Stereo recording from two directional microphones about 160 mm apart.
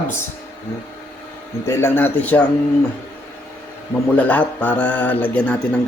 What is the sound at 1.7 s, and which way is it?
Speech, 15° left (ahead or behind).